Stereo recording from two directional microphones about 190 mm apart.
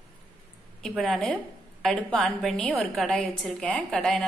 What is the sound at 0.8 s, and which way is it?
A woman's voice, centre (ahead or behind).